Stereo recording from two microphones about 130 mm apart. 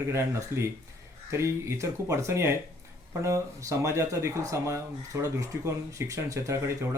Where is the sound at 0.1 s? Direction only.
20° right (ahead or behind).